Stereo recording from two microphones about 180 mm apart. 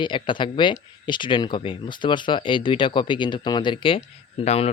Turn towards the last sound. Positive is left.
turn(degrees=35)  # may be behind; listen again after turning